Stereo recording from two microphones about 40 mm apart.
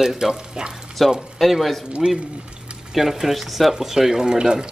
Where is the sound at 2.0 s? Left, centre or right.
Right.